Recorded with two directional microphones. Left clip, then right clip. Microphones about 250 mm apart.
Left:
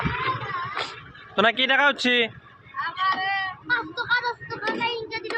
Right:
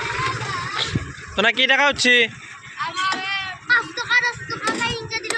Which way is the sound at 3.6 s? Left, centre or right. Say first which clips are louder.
Right 7 dB; centre.